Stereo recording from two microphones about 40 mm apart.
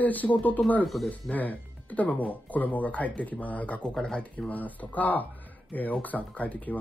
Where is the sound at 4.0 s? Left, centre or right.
Left.